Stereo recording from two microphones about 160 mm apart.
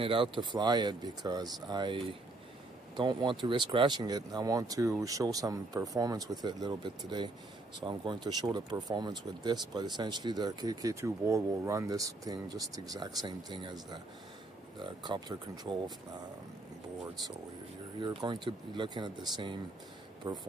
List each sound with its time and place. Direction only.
0.0 s speech: 35° right (ahead or behind)
18.2 s speech: 30° right (ahead or behind)